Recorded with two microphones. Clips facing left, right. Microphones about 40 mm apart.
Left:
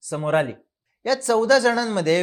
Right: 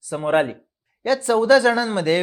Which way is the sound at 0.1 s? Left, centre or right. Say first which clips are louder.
Right 2 dB; centre.